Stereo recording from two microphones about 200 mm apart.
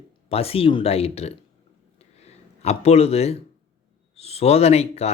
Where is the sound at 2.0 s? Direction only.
30° left (ahead or behind).